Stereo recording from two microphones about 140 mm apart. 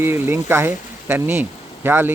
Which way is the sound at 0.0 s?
15° right (ahead or behind).